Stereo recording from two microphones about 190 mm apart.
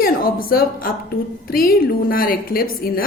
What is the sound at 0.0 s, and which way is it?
A woman's voice, 50° left (ahead or behind).